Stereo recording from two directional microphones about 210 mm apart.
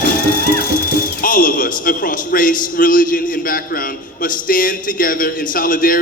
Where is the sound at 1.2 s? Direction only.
40° left (ahead or behind).